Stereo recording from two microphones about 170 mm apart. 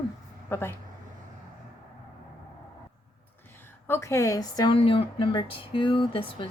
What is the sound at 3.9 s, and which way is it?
A woman's voice, 15° left (ahead or behind).